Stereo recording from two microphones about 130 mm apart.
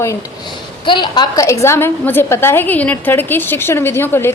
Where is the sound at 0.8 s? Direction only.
40° left (ahead or behind).